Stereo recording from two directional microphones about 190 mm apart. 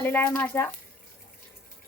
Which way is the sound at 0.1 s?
15° left (ahead or behind).